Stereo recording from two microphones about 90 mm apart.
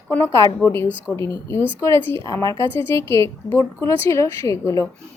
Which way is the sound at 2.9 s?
30° left (ahead or behind).